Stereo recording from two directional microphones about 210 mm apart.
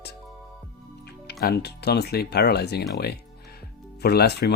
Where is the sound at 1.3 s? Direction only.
50° left (ahead or behind).